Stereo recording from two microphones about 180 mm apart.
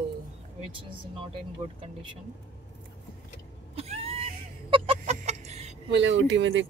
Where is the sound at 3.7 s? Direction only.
35° right (ahead or behind).